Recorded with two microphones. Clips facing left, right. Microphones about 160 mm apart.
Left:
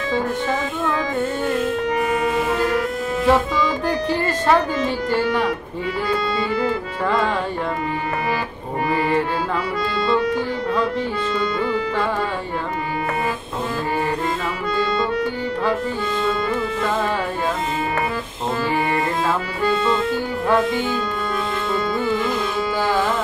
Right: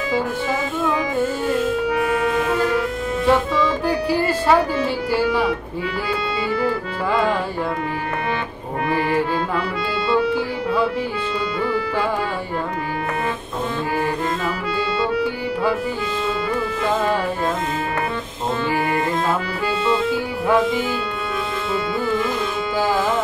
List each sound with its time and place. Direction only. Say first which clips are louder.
3.3 s speech: even; centre (ahead or behind)
5.1 s music: right 1 dB; 5° right (ahead or behind)
10.0 s music: right 1 dB; 5° right (ahead or behind)
14.8 s music: even; 5° right (ahead or behind)
19.6 s music: left 2 dB; 5° right (ahead or behind)
22.0 s music: even; centre (ahead or behind)